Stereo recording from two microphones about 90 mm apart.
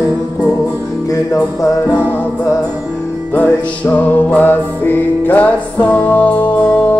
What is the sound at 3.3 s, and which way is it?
Music, 20° left (ahead or behind).